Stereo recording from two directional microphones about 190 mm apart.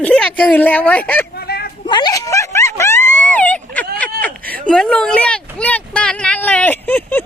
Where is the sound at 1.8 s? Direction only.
25° left (ahead or behind); by 3.8 s 10° left (ahead or behind).